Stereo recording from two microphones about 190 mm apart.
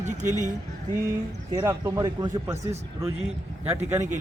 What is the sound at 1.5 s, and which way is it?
Speech, 20° right (ahead or behind).